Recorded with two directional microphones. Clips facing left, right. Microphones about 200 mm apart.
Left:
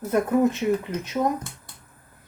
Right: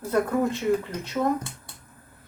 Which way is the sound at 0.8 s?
15° left (ahead or behind).